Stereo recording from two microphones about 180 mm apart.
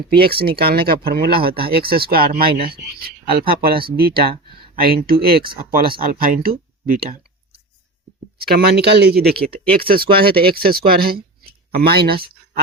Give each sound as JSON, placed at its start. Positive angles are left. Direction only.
{"t": 0.1, "sound": "speech", "side_deg": -60}
{"t": 8.4, "sound": "speech", "side_deg": -60}